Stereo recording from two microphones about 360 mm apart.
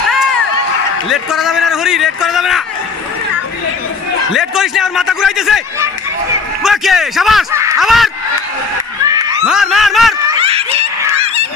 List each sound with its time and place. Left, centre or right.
1.0 s a man's voice: centre
4.4 s a man's voice: centre
9.0 s snicker: centre
10.4 s snicker: centre